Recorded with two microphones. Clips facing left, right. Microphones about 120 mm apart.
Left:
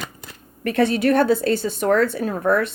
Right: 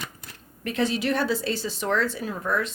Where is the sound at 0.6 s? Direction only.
60° left (ahead or behind).